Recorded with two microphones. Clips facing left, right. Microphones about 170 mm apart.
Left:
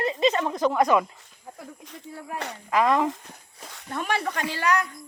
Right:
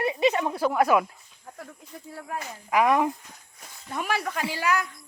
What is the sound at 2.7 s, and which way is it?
Speech, 15° right (ahead or behind).